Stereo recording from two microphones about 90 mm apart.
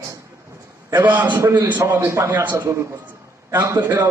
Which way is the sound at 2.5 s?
30° right (ahead or behind).